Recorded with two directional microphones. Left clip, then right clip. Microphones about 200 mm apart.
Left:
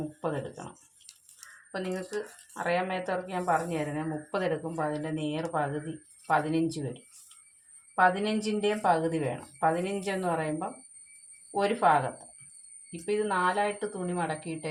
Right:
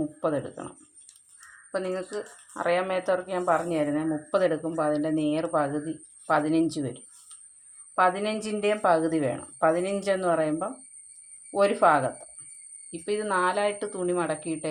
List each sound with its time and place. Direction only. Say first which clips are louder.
0.2 s a woman's voice: right 4 dB; 45° right (ahead or behind)
1.7 s a woman's voice: right 4 dB; 50° right (ahead or behind)
7.9 s a woman's voice: right 1 dB; 45° right (ahead or behind)